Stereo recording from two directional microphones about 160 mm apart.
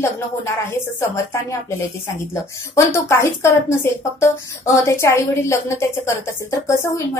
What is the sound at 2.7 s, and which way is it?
A woman's voice, 20° left (ahead or behind).